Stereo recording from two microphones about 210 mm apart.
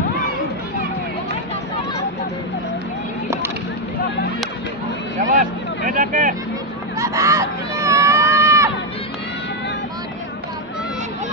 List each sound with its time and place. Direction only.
5.4 s vehicle: 40° right (ahead or behind)
7.0 s screaming: 15° right (ahead or behind)